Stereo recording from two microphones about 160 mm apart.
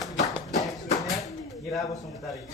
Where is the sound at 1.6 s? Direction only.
Centre (ahead or behind).